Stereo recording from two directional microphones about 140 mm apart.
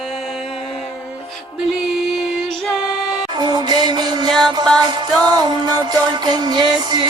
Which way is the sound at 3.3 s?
30° right (ahead or behind).